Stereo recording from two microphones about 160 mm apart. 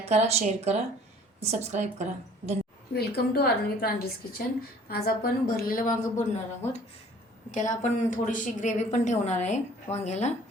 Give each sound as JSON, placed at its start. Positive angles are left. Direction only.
{"t": 0.0, "sound": "speech", "side_deg": -40}
{"t": 2.9, "sound": "a woman's voice", "side_deg": 90}
{"t": 7.5, "sound": "a woman's voice", "side_deg": 50}